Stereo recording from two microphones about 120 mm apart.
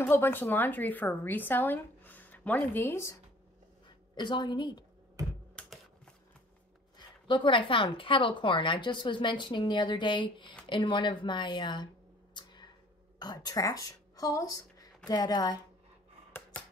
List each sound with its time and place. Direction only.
0.0 s a woman's voice: 20° left (ahead or behind)
3.8 s a woman's voice: 40° left (ahead or behind)
7.0 s a woman's voice: 40° left (ahead or behind)
12.4 s a sound: 40° left (ahead or behind)
13.2 s a woman's voice: 35° left (ahead or behind)